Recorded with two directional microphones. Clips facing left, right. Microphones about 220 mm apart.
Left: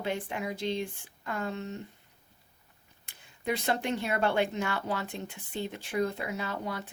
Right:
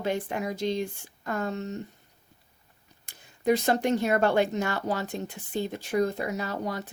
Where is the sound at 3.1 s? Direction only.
40° right (ahead or behind).